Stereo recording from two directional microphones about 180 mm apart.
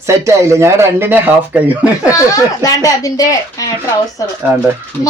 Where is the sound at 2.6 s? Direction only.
20° left (ahead or behind).